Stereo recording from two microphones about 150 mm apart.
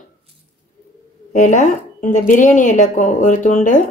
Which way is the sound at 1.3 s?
55° left (ahead or behind).